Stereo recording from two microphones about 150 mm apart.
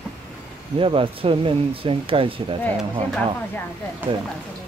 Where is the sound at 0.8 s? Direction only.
35° right (ahead or behind).